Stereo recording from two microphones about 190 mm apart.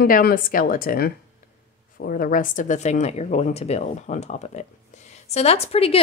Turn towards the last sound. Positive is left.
turn(degrees=30)  # may be behind; listen again after turning